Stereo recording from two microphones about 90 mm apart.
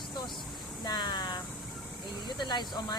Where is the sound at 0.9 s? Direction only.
55° left (ahead or behind).